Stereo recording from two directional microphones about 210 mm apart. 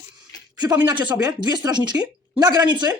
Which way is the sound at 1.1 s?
20° right (ahead or behind).